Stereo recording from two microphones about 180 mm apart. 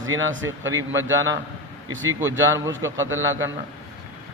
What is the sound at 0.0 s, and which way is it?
Speech, 90° right.